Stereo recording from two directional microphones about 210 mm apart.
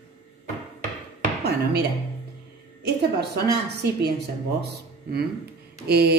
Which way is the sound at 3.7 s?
50° right (ahead or behind).